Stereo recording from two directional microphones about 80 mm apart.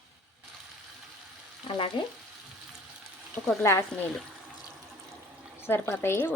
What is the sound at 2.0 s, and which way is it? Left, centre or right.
Frying, left.